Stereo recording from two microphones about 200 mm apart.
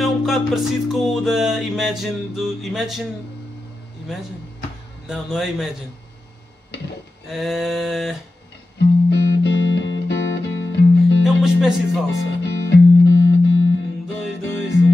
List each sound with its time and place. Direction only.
0.0 s music: centre (ahead or behind)
5.0 s music: centre (ahead or behind)
7.2 s music: centre (ahead or behind)
9.1 s music: 65° left (ahead or behind)
11.4 s music: centre (ahead or behind)
12.1 s music: 70° left (ahead or behind)